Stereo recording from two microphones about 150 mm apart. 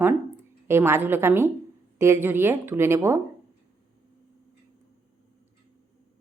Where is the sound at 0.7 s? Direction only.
15° right (ahead or behind).